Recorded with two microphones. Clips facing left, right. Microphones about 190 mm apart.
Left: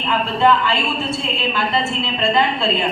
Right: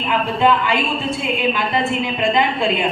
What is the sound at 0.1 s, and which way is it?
A woman's voice, 15° right (ahead or behind).